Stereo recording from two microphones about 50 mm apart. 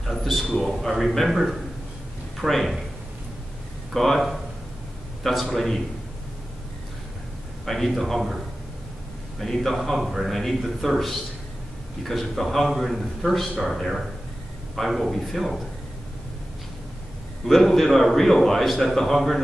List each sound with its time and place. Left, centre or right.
0.0 s a sound: centre
0.6 s a man's voice: centre
3.9 s a man's voice: centre
7.6 s a man's voice: centre
9.4 s a man's voice: centre
17.5 s a man's voice: centre